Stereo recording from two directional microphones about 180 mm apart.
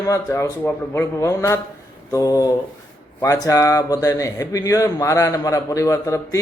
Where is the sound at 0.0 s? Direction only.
15° left (ahead or behind).